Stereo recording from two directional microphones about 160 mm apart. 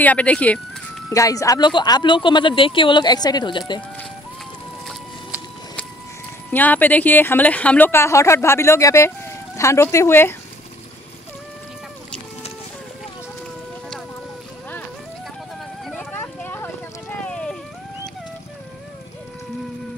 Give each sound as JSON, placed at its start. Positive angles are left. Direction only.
{"t": 0.0, "sound": "speech", "side_deg": 10}
{"t": 1.1, "sound": "speech", "side_deg": 20}
{"t": 6.5, "sound": "speech", "side_deg": 10}
{"t": 15.8, "sound": "a sound", "side_deg": 5}